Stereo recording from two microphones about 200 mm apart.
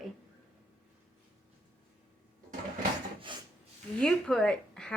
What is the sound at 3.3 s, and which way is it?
Rub, 25° right (ahead or behind).